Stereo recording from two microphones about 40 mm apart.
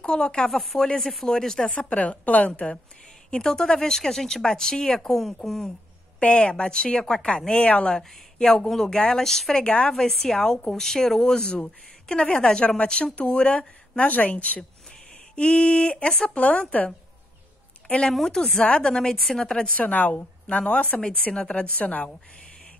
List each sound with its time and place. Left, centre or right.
0.0 s speech: left
0.5 s speech: centre
1.8 s a woman's voice: left
3.3 s speech: centre
6.2 s a woman's voice: left
7.5 s a woman's voice: left
7.9 s a woman's voice: centre; by 14.6 s left
15.3 s a woman's voice: left
18.2 s speech: centre
18.6 s a woman's voice: left
19.1 s speech: centre
19.8 s a woman's voice: left
20.4 s a woman's voice: left
21.0 s a woman's voice: left